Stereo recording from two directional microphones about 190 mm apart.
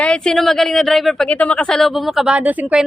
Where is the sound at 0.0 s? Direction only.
5° left (ahead or behind).